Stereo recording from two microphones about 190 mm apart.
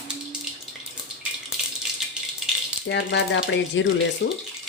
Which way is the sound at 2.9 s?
70° left (ahead or behind).